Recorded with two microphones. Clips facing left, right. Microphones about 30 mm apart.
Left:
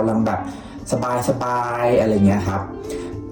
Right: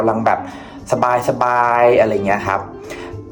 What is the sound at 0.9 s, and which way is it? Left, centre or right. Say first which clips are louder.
Speech: right 6 dB; right.